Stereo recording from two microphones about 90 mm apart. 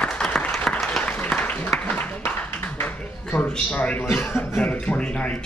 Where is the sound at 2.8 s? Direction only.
15° left (ahead or behind).